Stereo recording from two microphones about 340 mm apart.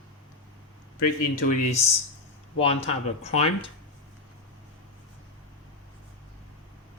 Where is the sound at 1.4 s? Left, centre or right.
Centre.